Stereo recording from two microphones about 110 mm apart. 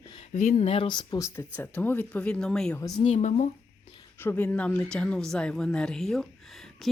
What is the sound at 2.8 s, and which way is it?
Speech, 35° left (ahead or behind).